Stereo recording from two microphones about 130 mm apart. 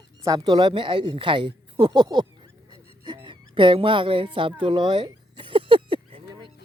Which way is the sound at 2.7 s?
35° right (ahead or behind).